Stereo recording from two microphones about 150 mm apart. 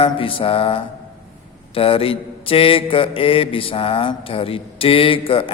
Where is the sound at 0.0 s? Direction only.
35° left (ahead or behind).